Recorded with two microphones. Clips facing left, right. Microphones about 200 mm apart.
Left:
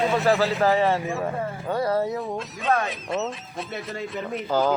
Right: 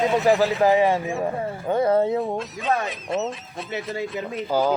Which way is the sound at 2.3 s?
Centre (ahead or behind).